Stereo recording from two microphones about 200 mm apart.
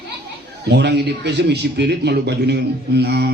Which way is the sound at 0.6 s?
55° right (ahead or behind).